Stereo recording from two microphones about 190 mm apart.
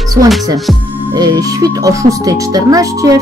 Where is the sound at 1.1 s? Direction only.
20° right (ahead or behind).